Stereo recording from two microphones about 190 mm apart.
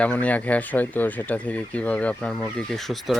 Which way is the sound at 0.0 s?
10° left (ahead or behind).